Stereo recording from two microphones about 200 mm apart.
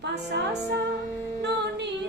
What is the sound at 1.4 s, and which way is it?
Female singing, 60° right (ahead or behind).